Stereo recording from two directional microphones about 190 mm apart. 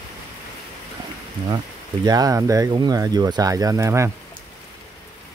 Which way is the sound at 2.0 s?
20° right (ahead or behind).